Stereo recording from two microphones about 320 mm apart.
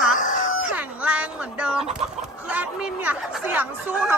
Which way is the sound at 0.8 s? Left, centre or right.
Centre.